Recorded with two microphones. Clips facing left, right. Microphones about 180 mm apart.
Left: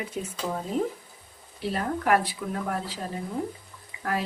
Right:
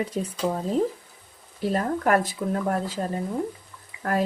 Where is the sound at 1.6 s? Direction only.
45° right (ahead or behind).